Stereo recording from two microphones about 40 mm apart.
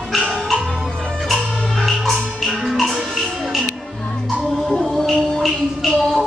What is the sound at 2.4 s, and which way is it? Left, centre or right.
Music, centre.